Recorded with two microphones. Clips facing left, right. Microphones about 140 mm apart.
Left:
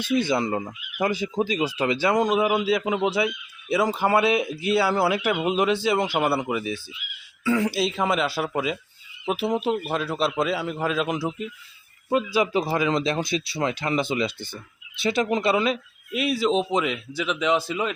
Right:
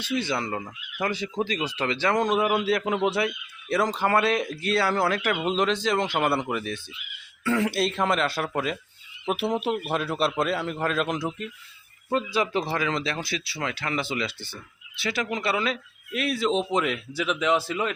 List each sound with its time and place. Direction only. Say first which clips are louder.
0.0 s a man's voice: left 5 dB; 15° left (ahead or behind)
16.1 s a man's voice: left 2 dB; centre (ahead or behind)